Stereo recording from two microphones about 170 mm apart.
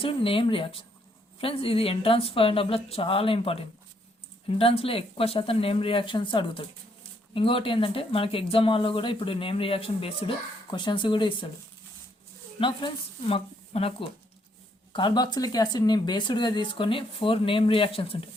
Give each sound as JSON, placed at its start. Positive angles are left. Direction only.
{"t": 0.0, "sound": "speech", "side_deg": 30}
{"t": 12.5, "sound": "speech", "side_deg": 30}